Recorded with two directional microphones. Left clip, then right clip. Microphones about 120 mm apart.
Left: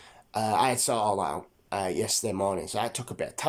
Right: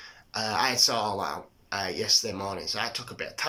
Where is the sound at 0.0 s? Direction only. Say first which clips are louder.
Left 2 dB; 35° left (ahead or behind).